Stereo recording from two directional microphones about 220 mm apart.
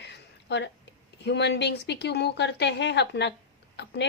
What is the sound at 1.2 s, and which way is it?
Speech, 50° left (ahead or behind).